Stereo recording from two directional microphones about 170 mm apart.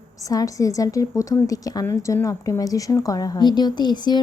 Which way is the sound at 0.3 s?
20° left (ahead or behind).